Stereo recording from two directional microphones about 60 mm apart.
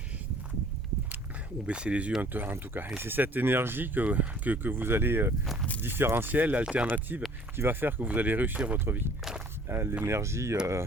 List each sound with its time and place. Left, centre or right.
1.6 s speech: centre
2.2 s speech: right
6.8 s speech: right
8.8 s speech: right